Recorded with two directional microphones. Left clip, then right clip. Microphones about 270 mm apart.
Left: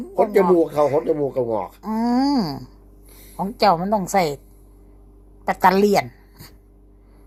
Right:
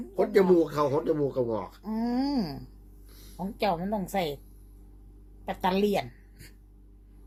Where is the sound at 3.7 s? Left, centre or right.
Centre.